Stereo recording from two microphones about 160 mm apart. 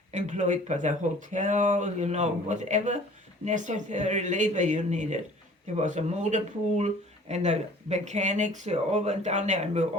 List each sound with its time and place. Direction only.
0.1 s speech: 50° right (ahead or behind)